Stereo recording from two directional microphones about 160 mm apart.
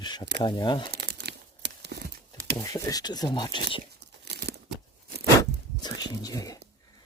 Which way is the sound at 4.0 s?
90° right.